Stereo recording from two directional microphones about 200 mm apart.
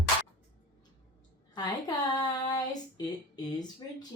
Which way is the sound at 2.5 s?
20° left (ahead or behind).